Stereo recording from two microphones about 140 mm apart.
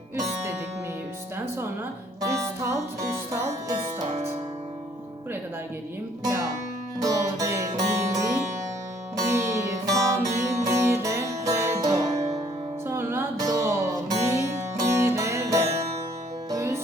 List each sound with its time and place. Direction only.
2.2 s music: 20° right (ahead or behind)
7.0 s music: 25° right (ahead or behind)
12.1 s music: 50° right (ahead or behind)
12.9 s music: 15° right (ahead or behind)